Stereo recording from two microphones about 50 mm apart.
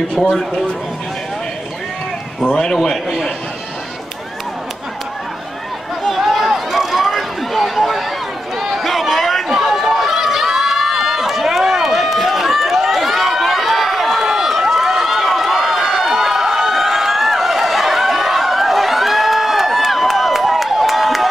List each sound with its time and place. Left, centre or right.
0.1 s speech: centre
2.4 s a man's voice: centre
2.7 s a man's voice: centre
6.0 s run: centre